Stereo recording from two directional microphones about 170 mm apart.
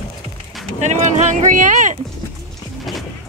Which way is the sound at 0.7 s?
45° right (ahead or behind).